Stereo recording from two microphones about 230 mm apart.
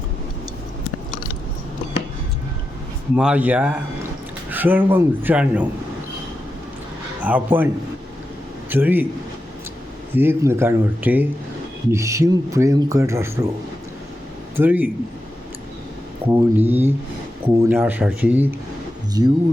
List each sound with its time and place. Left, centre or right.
3.2 s speech: centre
7.2 s speech: centre
8.7 s speech: centre
10.2 s speech: centre
14.5 s speech: centre
16.3 s speech: centre